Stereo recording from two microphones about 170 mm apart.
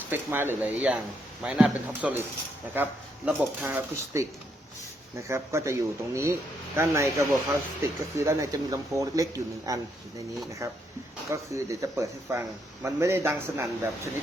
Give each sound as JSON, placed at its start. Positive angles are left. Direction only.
{"t": 0.1, "sound": "a man's voice", "side_deg": -10}